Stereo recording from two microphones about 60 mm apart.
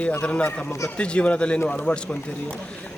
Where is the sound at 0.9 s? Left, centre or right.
Centre.